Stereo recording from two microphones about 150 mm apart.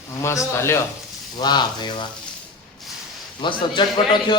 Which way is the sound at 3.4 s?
30° left (ahead or behind).